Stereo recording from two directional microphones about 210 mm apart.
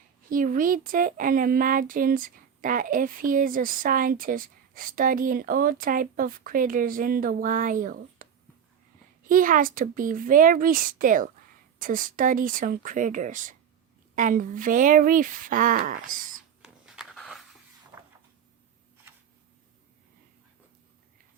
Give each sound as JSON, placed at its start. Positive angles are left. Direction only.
{"t": 0.3, "sound": "speech", "side_deg": -40}
{"t": 9.3, "sound": "speech", "side_deg": -40}
{"t": 16.6, "sound": "a sound", "side_deg": -5}